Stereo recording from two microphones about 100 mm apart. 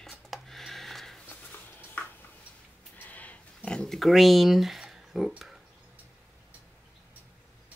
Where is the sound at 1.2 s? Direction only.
15° left (ahead or behind); by 5.5 s 5° right (ahead or behind).